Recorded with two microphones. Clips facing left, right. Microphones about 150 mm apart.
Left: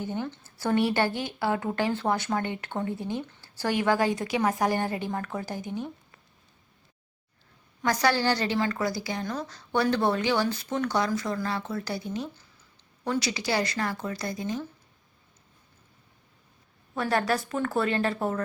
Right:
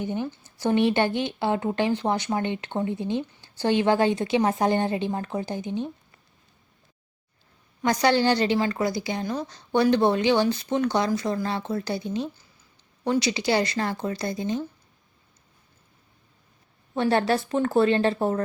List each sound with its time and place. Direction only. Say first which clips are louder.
0.0 s speech: right 3 dB; 20° right (ahead or behind)
7.8 s speech: right 4 dB; 20° right (ahead or behind)
16.9 s speech: right 4 dB; 25° right (ahead or behind)